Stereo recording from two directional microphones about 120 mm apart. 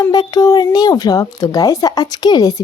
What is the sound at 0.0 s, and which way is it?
A child's voice, 30° left (ahead or behind).